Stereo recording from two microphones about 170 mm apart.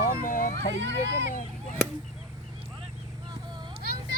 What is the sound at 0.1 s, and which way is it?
Cat, 55° left (ahead or behind).